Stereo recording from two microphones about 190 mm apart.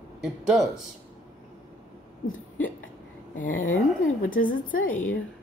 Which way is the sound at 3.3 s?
45° left (ahead or behind).